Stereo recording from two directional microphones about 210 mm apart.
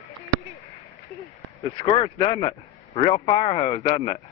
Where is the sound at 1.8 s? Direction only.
25° left (ahead or behind).